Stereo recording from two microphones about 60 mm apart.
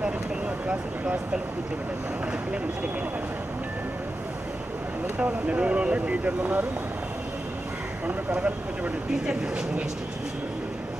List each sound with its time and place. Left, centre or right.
0.7 s speech: centre
5.2 s speech: right
8.3 s speech: right